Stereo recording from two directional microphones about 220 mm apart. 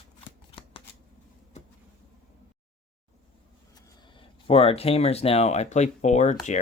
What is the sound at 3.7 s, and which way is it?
Speech, 20° left (ahead or behind).